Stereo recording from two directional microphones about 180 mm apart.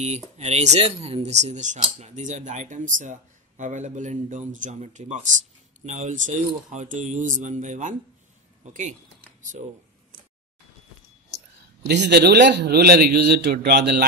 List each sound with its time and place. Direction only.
0.0 s speech: 40° right (ahead or behind)
9.4 s speech: 45° right (ahead or behind)
11.9 s a man's voice: 70° right (ahead or behind)